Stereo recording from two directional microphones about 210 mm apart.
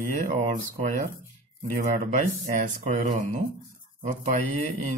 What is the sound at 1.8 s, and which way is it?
Speech, 35° right (ahead or behind).